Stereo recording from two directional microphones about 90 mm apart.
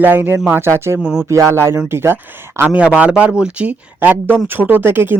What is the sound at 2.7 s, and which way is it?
Speech, 15° right (ahead or behind).